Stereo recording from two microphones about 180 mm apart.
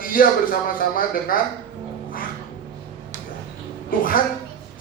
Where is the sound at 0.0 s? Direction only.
50° left (ahead or behind).